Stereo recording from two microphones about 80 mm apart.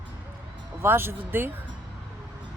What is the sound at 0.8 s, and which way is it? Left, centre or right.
Speech, right.